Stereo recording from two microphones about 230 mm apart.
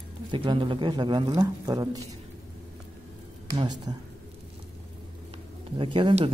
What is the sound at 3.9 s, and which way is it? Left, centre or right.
Speech, centre.